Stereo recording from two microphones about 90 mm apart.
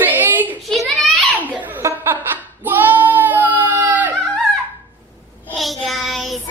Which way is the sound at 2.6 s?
20° right (ahead or behind).